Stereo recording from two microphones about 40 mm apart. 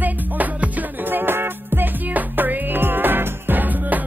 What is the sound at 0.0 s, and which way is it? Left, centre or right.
Music, right.